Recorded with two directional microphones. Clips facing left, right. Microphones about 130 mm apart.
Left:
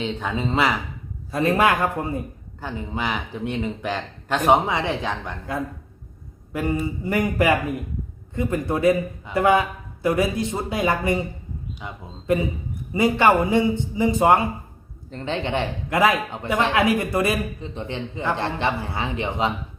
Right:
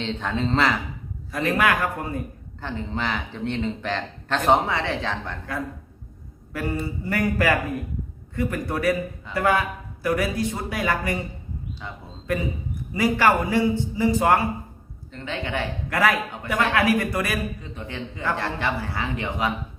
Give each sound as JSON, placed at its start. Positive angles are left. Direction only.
{"t": 0.0, "sound": "speech", "side_deg": 10}
{"t": 1.3, "sound": "a man's voice", "side_deg": 25}
{"t": 2.6, "sound": "a man's voice", "side_deg": 10}